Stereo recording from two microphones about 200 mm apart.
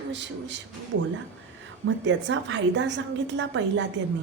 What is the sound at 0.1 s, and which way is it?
Speech, 60° right (ahead or behind).